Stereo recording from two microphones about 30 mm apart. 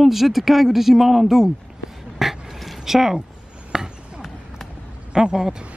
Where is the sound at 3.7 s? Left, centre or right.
Right.